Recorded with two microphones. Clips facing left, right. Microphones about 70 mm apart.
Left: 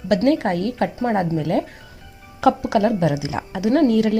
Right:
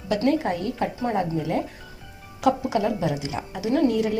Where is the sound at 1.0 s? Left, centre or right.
Left.